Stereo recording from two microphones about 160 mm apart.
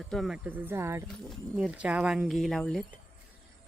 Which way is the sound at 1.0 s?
Centre (ahead or behind).